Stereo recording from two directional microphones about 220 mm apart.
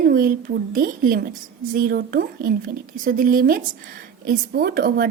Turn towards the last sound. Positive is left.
turn(degrees=-40)  # may be behind; listen again after turning